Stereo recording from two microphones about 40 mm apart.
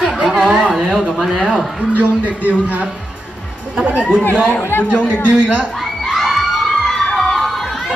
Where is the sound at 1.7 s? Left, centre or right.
Right.